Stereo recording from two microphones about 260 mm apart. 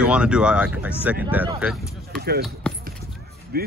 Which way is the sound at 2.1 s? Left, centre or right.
Right.